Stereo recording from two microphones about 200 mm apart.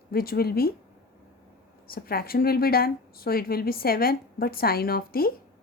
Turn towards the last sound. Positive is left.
turn(degrees=50)  # may be behind; listen again after turning